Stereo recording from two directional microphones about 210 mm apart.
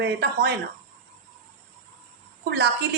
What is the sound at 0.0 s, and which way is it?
Speech, 50° right (ahead or behind).